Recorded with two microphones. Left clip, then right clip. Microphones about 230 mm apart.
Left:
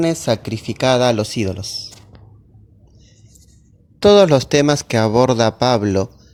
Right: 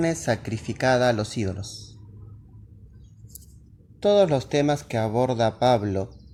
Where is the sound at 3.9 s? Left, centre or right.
Left.